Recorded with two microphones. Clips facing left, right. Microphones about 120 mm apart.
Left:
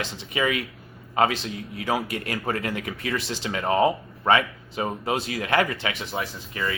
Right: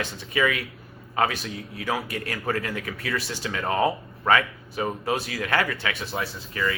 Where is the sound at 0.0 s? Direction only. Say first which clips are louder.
Right 1 dB; 25° left (ahead or behind).